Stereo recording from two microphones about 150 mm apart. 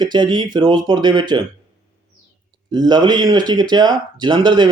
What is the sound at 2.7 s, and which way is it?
Speech, 30° right (ahead or behind).